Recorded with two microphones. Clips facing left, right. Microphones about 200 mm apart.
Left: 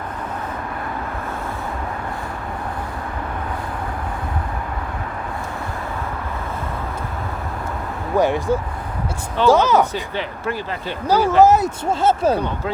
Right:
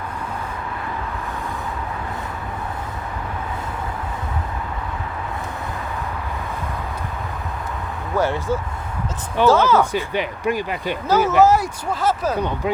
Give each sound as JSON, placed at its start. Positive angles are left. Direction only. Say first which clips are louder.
{"t": 8.1, "sound": "speech", "louder": "left 3 dB", "side_deg": 15}
{"t": 9.9, "sound": "speech", "louder": "right 3 dB", "side_deg": -15}
{"t": 11.1, "sound": "speech", "louder": "left 2 dB", "side_deg": 15}